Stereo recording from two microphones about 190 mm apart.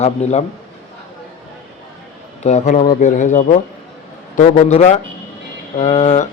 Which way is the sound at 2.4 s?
35° left (ahead or behind).